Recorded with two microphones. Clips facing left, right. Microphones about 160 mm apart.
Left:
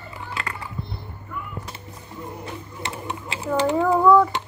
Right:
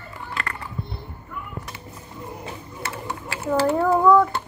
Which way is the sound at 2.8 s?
20° left (ahead or behind).